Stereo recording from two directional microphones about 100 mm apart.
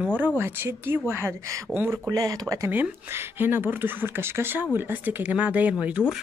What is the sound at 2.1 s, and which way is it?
Speech, 35° right (ahead or behind).